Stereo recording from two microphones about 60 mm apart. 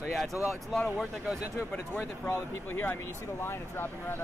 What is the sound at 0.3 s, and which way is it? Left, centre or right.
Speech, right.